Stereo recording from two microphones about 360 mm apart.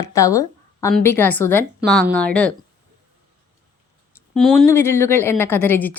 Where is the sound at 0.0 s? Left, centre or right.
Centre.